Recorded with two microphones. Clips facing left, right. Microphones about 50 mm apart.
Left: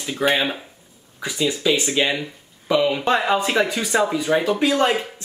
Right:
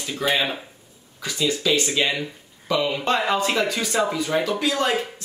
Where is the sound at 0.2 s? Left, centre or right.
Left.